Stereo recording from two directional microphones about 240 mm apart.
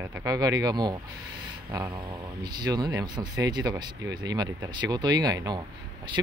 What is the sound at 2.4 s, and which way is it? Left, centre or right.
Speech, centre.